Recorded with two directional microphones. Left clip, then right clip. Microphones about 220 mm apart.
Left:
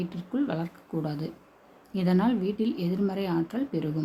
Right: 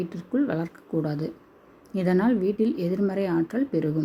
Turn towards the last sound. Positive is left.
turn(degrees=-10)  # may be behind; listen again after turning